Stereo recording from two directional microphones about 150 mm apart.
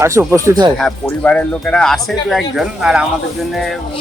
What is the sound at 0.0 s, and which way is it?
Speech, 15° right (ahead or behind).